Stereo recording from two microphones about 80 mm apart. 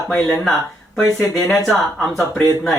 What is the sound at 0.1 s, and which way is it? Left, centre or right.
Speech, centre.